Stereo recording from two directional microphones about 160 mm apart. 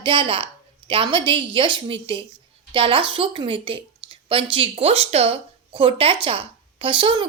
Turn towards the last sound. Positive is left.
turn(degrees=-30)  # may be behind; listen again after turning